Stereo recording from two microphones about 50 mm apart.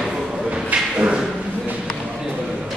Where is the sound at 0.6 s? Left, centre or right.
Centre.